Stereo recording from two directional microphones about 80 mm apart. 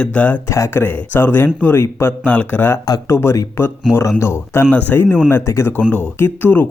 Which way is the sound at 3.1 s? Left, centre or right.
Left.